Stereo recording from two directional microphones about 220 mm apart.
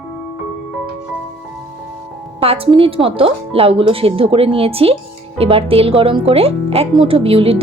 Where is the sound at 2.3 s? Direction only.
25° right (ahead or behind).